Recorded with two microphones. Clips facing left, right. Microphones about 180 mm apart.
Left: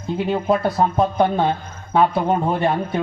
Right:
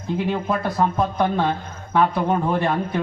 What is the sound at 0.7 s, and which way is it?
Speech, 30° left (ahead or behind).